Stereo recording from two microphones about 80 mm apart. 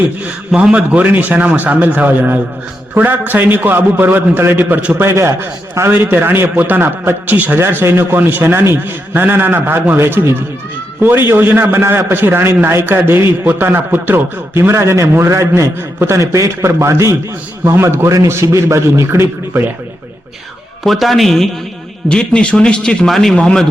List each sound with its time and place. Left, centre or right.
0.3 s a man's voice: centre
5.0 s a man's voice: right
5.9 s a man's voice: right
20.8 s a man's voice: centre